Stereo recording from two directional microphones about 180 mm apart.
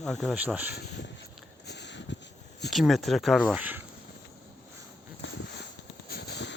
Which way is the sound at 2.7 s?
Centre (ahead or behind).